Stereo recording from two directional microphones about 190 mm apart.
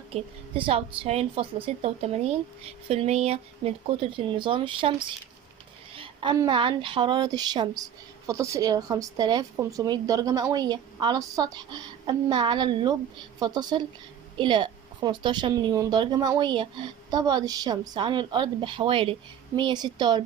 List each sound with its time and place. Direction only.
0.1 s a woman's voice: 30° right (ahead or behind)